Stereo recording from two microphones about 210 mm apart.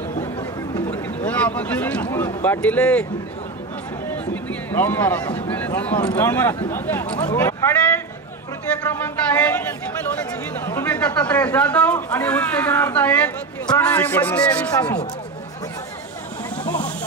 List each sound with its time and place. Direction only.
0.2 s chatter: 20° left (ahead or behind)
0.9 s speech: 5° left (ahead or behind)
4.1 s a sound: 10° left (ahead or behind)
5.3 s speech: 10° left (ahead or behind)
10.6 s speech: 10° left (ahead or behind)
16.6 s a sound: 5° left (ahead or behind)